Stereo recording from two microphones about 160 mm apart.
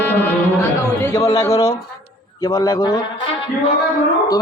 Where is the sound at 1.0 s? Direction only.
20° left (ahead or behind).